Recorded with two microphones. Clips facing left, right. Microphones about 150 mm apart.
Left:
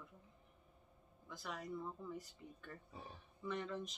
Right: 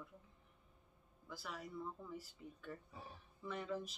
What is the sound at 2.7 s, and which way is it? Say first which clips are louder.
Speech: right 1 dB; 5° right (ahead or behind).